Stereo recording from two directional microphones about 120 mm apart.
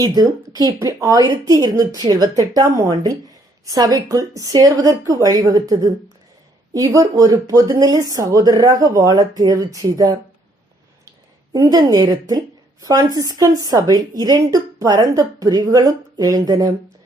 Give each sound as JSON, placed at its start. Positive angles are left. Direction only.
{"t": 0.0, "sound": "speech", "side_deg": -30}
{"t": 11.5, "sound": "speech", "side_deg": -30}